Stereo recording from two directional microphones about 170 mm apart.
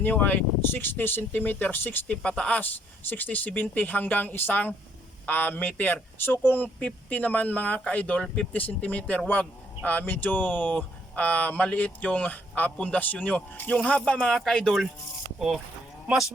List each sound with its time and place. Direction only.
0.0 s speech: 10° left (ahead or behind)